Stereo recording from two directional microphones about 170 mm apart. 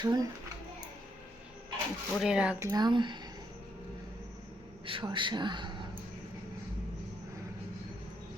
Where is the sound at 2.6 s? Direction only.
25° right (ahead or behind).